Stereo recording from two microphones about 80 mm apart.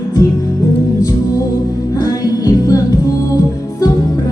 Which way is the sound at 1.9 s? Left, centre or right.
Left.